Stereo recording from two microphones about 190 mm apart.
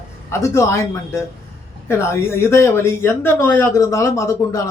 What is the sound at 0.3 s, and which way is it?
Speech, 15° left (ahead or behind).